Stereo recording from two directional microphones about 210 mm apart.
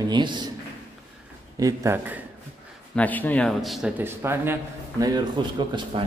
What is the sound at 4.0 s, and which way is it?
A man's voice, 10° right (ahead or behind).